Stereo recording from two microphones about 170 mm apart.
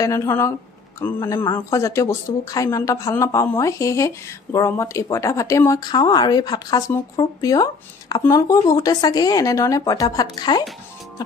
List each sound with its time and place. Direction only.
0.0 s speech: 20° left (ahead or behind)